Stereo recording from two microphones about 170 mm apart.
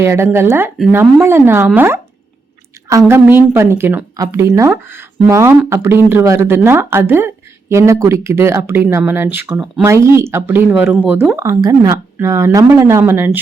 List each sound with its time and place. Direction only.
0.0 s speech: 15° right (ahead or behind)
3.1 s speech: 15° right (ahead or behind)
9.8 s speech: 15° right (ahead or behind)